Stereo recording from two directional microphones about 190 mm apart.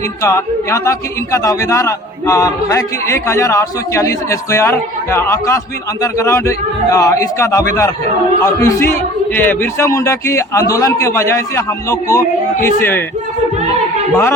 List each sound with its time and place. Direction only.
0.2 s a man's voice: 15° left (ahead or behind)